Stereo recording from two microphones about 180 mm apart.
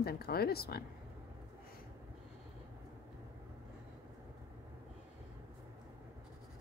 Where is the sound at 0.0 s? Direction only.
60° left (ahead or behind).